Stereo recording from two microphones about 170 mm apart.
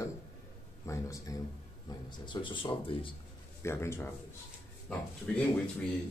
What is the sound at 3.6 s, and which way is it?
Speech, 15° left (ahead or behind).